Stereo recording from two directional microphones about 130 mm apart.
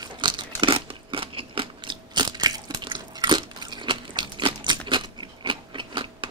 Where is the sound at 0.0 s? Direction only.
35° right (ahead or behind).